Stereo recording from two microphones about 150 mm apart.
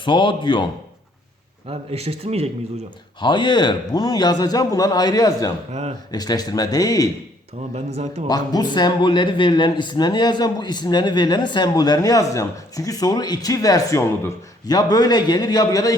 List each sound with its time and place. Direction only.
0.0 s speech: 30° left (ahead or behind)
1.6 s speech: 40° right (ahead or behind)
3.2 s speech: 30° left (ahead or behind)
7.7 s speech: 45° right (ahead or behind)
8.3 s speech: 25° left (ahead or behind)